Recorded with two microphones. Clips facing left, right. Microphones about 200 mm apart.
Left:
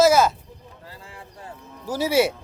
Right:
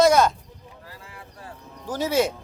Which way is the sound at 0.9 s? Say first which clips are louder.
Left 3 dB; 30° left (ahead or behind).